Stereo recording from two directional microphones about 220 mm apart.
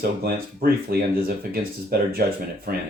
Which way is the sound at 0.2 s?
45° right (ahead or behind).